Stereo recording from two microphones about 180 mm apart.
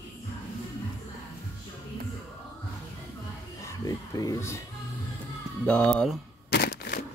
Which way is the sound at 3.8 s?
20° left (ahead or behind).